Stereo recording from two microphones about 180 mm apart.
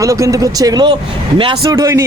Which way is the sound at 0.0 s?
15° right (ahead or behind).